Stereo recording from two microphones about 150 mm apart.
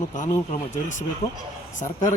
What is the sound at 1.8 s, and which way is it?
Speech, 55° left (ahead or behind).